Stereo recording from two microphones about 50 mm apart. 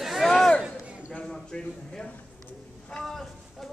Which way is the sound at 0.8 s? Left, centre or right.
Right.